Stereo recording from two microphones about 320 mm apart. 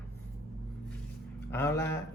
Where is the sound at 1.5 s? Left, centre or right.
Centre.